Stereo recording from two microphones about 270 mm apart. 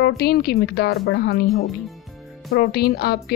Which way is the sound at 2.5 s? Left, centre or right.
Left.